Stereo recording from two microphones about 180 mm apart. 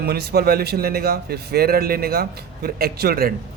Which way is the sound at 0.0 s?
60° right (ahead or behind).